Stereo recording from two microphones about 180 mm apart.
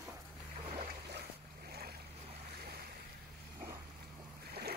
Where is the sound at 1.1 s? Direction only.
65° right (ahead or behind).